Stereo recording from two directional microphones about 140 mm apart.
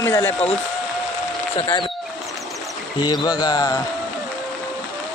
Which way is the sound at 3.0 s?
30° left (ahead or behind).